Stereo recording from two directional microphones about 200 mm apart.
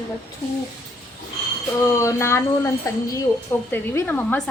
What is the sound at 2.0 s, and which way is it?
Speech, 15° left (ahead or behind).